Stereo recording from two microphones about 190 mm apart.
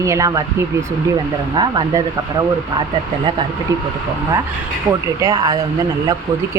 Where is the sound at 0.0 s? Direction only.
15° right (ahead or behind).